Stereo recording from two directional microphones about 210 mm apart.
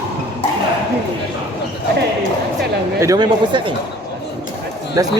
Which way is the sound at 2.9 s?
15° right (ahead or behind).